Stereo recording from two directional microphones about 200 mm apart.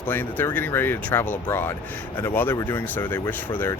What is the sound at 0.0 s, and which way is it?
Speech, 10° left (ahead or behind).